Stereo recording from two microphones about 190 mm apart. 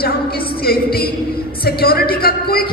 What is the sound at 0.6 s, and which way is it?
Speech, 55° left (ahead or behind).